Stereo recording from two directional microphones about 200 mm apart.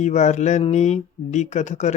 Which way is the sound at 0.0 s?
35° left (ahead or behind).